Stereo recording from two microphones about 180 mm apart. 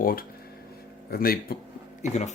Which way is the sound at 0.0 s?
55° left (ahead or behind).